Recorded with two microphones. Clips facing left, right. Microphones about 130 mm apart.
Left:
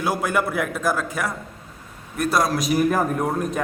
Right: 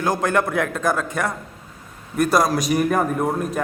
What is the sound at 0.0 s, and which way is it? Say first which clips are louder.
A man's voice: right 2 dB; 10° left (ahead or behind).